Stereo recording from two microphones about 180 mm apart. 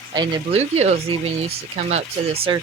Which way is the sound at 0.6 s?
35° right (ahead or behind).